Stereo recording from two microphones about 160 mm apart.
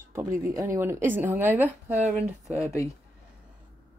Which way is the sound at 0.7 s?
15° right (ahead or behind).